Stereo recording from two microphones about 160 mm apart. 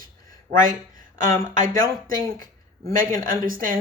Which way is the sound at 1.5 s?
60° right (ahead or behind).